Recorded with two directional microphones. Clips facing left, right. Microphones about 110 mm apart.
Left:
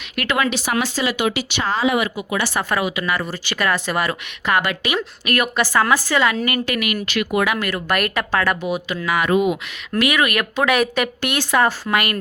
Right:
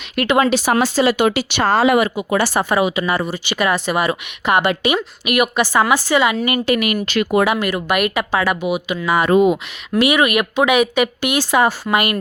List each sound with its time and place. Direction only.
0.2 s speech: 25° right (ahead or behind)
0.5 s speech: 40° right (ahead or behind)
1.2 s speech: 50° right (ahead or behind)
1.6 s speech: 65° right (ahead or behind)
2.3 s speech: 35° right (ahead or behind)
2.6 s speech: 25° right (ahead or behind)
3.2 s speech: 15° right (ahead or behind)
9.0 s speech: 30° right (ahead or behind); by 12.2 s 15° right (ahead or behind)